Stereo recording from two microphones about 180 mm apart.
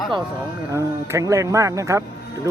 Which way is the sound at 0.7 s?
15° right (ahead or behind).